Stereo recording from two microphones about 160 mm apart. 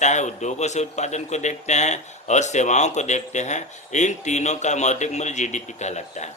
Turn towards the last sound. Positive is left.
turn(degrees=45)  # may be behind; listen again after turning